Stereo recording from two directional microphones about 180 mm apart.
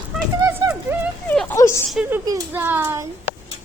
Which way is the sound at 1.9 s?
5° right (ahead or behind).